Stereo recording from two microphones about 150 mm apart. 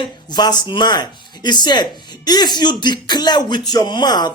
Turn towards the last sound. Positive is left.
turn(degrees=30)  # may be behind; listen again after turning